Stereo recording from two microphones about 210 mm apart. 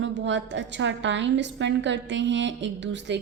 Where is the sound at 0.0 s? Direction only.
60° right (ahead or behind).